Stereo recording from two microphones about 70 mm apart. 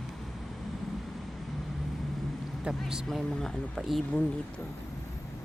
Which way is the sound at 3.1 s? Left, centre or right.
Centre.